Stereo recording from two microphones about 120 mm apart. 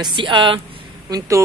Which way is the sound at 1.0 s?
30° right (ahead or behind).